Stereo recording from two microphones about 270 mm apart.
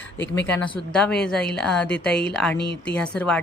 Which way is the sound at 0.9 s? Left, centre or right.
Centre.